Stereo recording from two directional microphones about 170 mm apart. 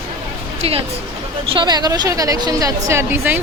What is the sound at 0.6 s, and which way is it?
Music, 35° right (ahead or behind).